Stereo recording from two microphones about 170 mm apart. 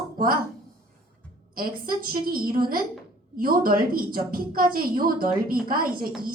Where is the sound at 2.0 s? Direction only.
60° right (ahead or behind).